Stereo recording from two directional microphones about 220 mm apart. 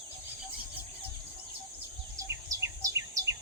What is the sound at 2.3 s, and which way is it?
Insect, 15° right (ahead or behind).